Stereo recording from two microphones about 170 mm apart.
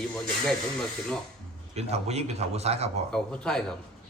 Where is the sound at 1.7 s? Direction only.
40° right (ahead or behind).